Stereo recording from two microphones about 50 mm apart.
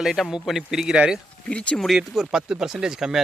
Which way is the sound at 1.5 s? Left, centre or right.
Left.